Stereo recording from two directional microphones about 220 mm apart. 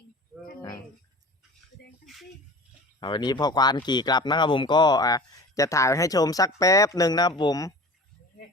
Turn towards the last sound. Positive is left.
turn(degrees=15)  # may be behind; listen again after turning